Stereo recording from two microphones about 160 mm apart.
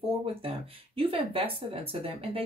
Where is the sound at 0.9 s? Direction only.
35° right (ahead or behind).